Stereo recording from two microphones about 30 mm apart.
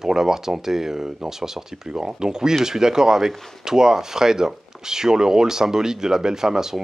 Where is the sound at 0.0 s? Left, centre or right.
Centre.